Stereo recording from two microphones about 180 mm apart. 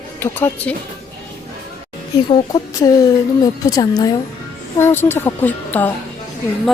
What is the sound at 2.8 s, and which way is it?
A woman's voice, 20° left (ahead or behind).